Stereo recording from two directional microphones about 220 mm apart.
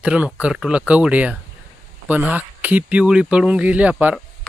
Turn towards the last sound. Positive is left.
turn(degrees=-5)  # may be behind; listen again after turning